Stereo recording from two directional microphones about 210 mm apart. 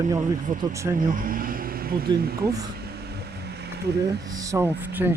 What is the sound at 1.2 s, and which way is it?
Vehicle, 40° right (ahead or behind).